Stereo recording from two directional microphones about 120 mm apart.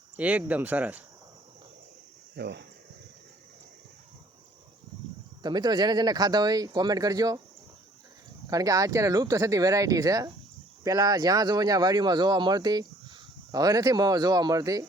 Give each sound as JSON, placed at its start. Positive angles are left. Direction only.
{"t": 0.2, "sound": "speech", "side_deg": -10}
{"t": 5.4, "sound": "speech", "side_deg": -35}
{"t": 8.4, "sound": "speech", "side_deg": -30}